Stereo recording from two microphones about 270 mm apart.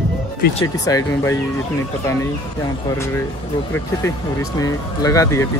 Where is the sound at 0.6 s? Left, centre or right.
Centre.